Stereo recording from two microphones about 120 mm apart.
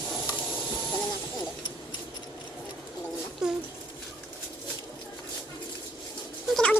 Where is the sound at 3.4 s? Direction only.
5° right (ahead or behind).